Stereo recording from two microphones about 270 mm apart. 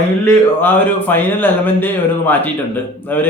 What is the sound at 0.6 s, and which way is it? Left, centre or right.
Speech, centre.